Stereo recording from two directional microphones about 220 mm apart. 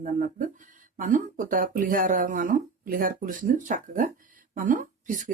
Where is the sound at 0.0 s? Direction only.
35° right (ahead or behind).